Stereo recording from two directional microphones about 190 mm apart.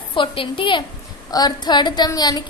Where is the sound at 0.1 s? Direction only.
25° left (ahead or behind).